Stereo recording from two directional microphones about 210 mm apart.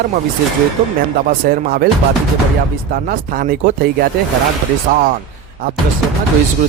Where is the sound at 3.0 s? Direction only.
40° right (ahead or behind).